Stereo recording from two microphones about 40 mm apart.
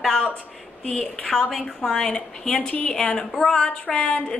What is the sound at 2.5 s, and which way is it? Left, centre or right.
Speech, left.